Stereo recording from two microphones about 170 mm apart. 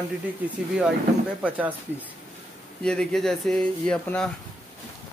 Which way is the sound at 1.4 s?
10° right (ahead or behind).